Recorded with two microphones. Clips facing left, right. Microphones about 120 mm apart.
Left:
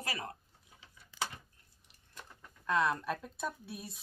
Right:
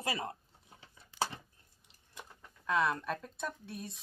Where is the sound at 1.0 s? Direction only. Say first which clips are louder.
Right 4 dB; 30° right (ahead or behind).